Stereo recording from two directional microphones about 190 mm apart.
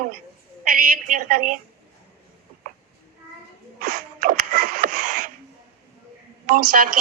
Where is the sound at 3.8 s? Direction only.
45° right (ahead or behind).